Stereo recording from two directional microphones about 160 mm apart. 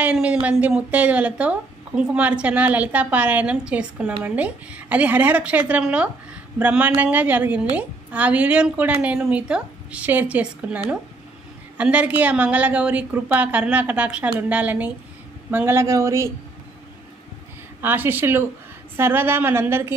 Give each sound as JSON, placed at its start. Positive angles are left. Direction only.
{"t": 0.0, "sound": "a woman's voice", "side_deg": -5}
{"t": 17.8, "sound": "a woman's voice", "side_deg": -15}